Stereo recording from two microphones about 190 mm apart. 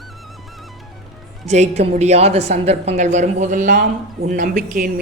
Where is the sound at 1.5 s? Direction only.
35° right (ahead or behind).